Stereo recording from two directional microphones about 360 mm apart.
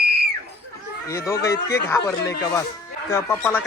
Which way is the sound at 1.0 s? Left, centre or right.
Centre.